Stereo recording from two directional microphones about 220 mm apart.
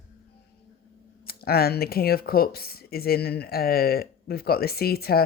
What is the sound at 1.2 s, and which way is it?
Speech, 45° left (ahead or behind).